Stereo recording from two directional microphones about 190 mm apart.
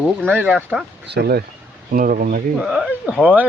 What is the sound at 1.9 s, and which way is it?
Speech, 45° right (ahead or behind).